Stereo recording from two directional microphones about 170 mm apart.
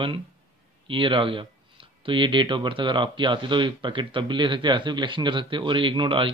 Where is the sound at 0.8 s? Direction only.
30° right (ahead or behind).